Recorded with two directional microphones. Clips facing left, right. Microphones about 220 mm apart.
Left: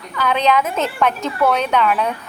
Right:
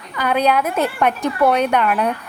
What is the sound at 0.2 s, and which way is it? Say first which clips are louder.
A woman's voice: even; 10° right (ahead or behind).